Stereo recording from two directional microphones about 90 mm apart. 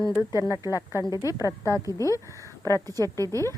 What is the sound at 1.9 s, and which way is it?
Speech, 40° left (ahead or behind).